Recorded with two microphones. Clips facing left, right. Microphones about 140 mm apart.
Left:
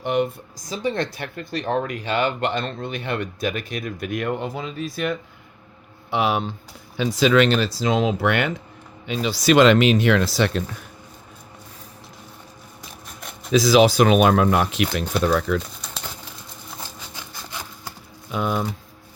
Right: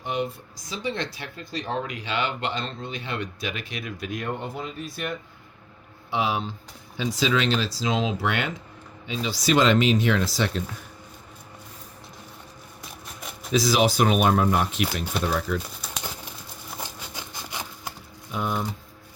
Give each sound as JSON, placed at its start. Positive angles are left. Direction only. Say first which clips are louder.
{"t": 0.0, "sound": "speech", "louder": "left 6 dB", "side_deg": 65}
{"t": 0.5, "sound": "speech", "louder": "left 5 dB", "side_deg": 45}
{"t": 4.1, "sound": "speech", "louder": "left 6 dB", "side_deg": 75}
{"t": 6.1, "sound": "speech", "louder": "left 4 dB", "side_deg": 65}
{"t": 13.1, "sound": "a sound", "louder": "even", "side_deg": 0}
{"t": 13.5, "sound": "speech", "louder": "left 6 dB", "side_deg": 90}
{"t": 15.8, "sound": "bird", "louder": "even", "side_deg": -5}
{"t": 17.2, "sound": "wood", "louder": "even", "side_deg": -20}
{"t": 18.3, "sound": "speech", "louder": "left 4 dB", "side_deg": 90}